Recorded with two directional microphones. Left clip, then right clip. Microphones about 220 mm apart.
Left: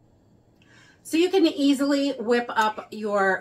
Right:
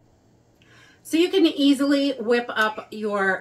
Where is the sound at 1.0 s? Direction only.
10° right (ahead or behind).